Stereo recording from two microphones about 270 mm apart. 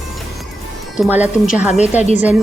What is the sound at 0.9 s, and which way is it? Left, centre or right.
Speech, centre.